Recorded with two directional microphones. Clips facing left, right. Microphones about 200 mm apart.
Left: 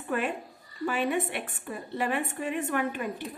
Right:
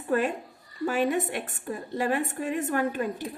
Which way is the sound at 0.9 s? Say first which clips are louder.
Right 3 dB; 40° right (ahead or behind).